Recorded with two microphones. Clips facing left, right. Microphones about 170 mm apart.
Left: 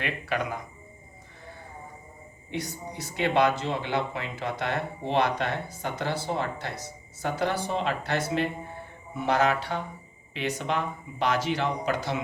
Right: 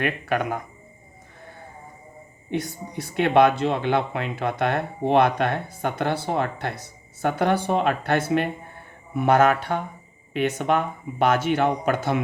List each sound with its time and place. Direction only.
0.0 s speech: 55° right (ahead or behind)
2.5 s speech: 55° right (ahead or behind)